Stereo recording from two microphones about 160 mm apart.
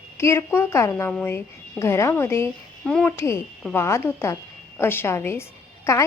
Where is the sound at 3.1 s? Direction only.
15° left (ahead or behind).